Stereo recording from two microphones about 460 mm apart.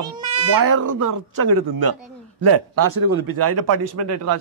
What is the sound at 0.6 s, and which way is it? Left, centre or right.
Speech, right.